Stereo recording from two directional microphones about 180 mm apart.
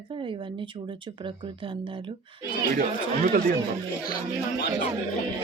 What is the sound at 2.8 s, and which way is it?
Speech, 50° right (ahead or behind).